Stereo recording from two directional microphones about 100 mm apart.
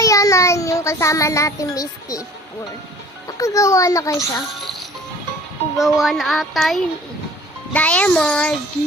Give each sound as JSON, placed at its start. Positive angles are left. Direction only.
{"t": 0.0, "sound": "child singing", "side_deg": 35}
{"t": 3.2, "sound": "a child's voice", "side_deg": 35}
{"t": 4.5, "sound": "music", "side_deg": 0}
{"t": 5.7, "sound": "speech", "side_deg": 0}
{"t": 7.7, "sound": "a child's voice", "side_deg": 15}